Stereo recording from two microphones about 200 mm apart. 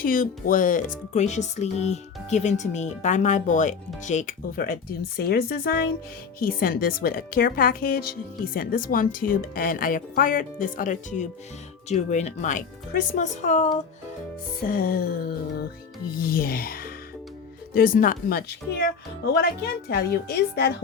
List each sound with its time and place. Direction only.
0.0 s a woman's voice: 45° left (ahead or behind)